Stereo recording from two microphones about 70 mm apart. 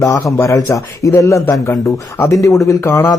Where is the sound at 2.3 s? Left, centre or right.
Left.